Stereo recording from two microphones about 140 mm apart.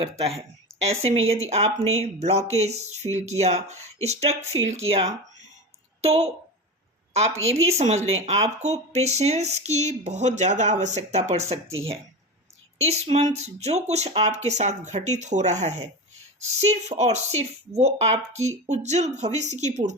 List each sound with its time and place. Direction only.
0.0 s a woman's voice: 45° right (ahead or behind)
7.6 s speech: 50° right (ahead or behind)